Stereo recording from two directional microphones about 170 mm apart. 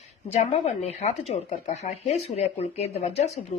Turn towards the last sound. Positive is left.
turn(degrees=40)  # may be behind; listen again after turning